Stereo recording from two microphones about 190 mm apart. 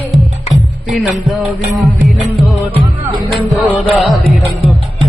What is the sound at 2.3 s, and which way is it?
Music, centre (ahead or behind).